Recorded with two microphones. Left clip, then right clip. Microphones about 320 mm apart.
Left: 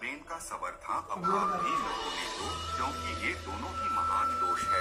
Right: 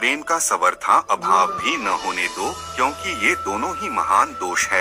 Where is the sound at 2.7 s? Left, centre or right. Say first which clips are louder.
Right 15 dB; right.